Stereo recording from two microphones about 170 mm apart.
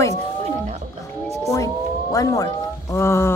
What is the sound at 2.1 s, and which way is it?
Speech, 20° left (ahead or behind).